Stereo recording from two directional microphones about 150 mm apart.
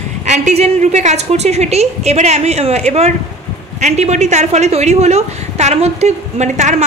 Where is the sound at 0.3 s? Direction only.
50° right (ahead or behind).